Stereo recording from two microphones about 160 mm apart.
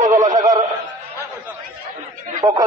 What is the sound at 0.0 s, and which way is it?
Synthetic singing, 20° right (ahead or behind).